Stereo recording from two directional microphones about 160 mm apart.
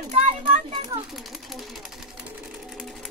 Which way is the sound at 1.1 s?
Centre (ahead or behind).